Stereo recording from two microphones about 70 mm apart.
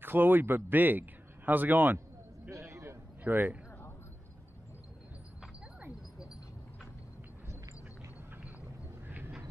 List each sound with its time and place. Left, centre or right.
0.0 s a man's voice: right
2.5 s a sound: right
3.3 s speech: right